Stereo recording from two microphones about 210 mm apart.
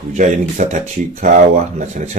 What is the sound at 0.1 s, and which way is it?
Speech, 35° right (ahead or behind).